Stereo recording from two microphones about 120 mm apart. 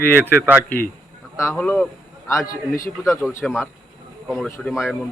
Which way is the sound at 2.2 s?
25° left (ahead or behind).